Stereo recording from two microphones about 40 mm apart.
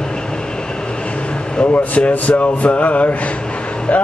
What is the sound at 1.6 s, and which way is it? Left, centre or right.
A man's voice, left.